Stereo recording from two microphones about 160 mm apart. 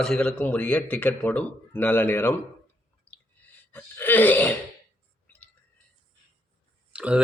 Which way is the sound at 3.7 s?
10° left (ahead or behind).